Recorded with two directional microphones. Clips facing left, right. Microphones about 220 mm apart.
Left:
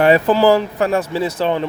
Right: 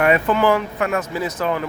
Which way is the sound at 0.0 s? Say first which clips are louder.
Left 4 dB; 30° left (ahead or behind).